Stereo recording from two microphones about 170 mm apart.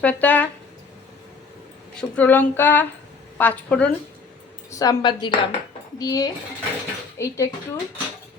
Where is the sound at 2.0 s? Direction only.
10° left (ahead or behind).